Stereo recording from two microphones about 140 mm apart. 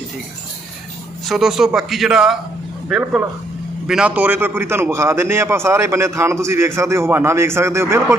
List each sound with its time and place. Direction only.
1.3 s a man's voice: centre (ahead or behind); by 8.0 s 20° right (ahead or behind)